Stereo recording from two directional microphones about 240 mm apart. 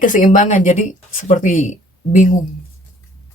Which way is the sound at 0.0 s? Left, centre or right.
Left.